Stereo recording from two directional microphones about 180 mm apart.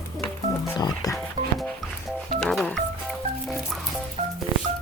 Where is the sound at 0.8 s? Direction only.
20° left (ahead or behind).